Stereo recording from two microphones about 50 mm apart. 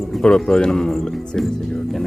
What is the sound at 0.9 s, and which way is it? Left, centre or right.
Speech, centre.